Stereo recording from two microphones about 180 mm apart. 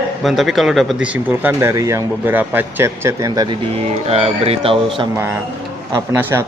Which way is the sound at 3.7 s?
35° right (ahead or behind).